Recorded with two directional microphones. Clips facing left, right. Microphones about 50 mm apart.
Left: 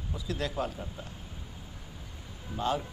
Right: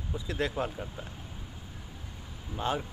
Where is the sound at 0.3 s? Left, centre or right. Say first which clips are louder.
Right 1 dB; right.